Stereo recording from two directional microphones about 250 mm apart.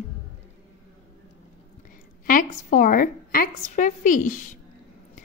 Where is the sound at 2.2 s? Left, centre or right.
Left.